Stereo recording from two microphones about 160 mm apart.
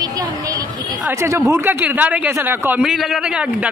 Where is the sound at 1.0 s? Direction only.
15° right (ahead or behind).